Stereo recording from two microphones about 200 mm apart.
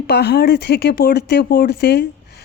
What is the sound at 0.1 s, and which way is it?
Speech, 55° left (ahead or behind).